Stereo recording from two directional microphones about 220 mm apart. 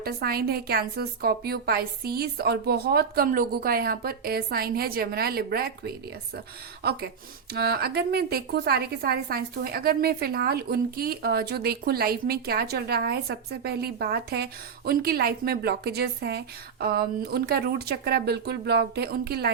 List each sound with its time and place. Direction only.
0.0 s a woman's voice: 45° right (ahead or behind)
7.5 s a woman's voice: 45° right (ahead or behind)